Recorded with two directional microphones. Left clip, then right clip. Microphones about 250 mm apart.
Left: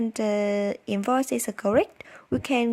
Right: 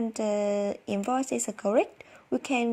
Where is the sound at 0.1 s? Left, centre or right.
Left.